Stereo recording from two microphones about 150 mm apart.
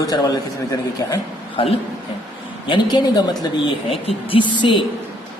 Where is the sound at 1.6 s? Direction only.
35° left (ahead or behind).